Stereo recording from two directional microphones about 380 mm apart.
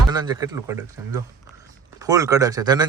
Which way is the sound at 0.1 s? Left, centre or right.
Centre.